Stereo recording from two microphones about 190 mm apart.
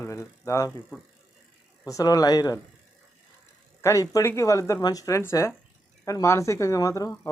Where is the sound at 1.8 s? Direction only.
20° left (ahead or behind).